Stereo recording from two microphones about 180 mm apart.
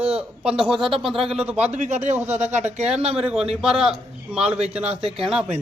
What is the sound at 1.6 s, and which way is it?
Speech, 40° right (ahead or behind).